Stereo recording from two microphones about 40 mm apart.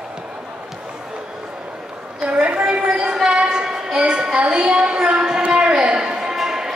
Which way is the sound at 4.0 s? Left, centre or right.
Right.